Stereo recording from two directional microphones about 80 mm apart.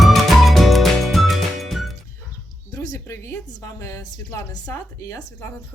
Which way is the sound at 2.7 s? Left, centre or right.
Left.